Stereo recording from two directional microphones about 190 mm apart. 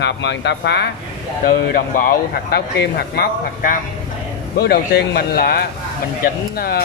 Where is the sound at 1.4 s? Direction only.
50° left (ahead or behind).